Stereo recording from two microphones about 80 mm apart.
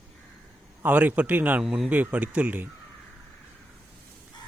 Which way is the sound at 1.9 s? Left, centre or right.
Centre.